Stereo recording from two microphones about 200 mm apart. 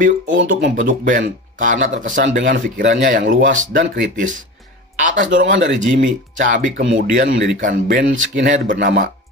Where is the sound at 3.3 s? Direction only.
40° right (ahead or behind).